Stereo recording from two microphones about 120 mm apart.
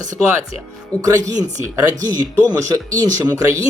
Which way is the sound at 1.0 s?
30° right (ahead or behind).